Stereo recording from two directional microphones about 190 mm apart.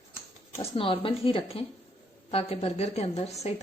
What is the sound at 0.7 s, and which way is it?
A woman's voice, 30° left (ahead or behind).